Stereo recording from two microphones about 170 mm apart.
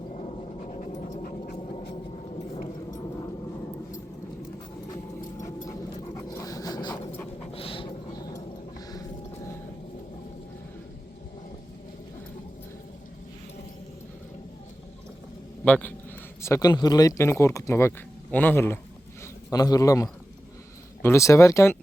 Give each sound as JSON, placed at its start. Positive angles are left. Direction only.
{"t": 0.1, "sound": "dog", "side_deg": 40}
{"t": 5.4, "sound": "a sound", "side_deg": 20}
{"t": 6.1, "sound": "dog", "side_deg": 20}
{"t": 7.5, "sound": "a sound", "side_deg": 30}
{"t": 15.6, "sound": "a man's voice", "side_deg": 10}
{"t": 16.4, "sound": "a man's voice", "side_deg": 20}